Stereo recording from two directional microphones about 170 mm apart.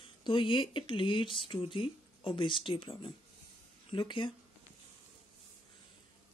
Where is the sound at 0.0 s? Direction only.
30° left (ahead or behind).